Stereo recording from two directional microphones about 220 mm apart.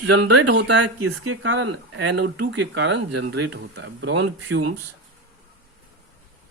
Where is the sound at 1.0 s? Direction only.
75° right (ahead or behind).